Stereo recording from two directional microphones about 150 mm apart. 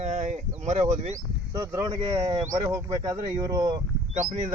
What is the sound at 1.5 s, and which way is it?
Speech, 25° right (ahead or behind).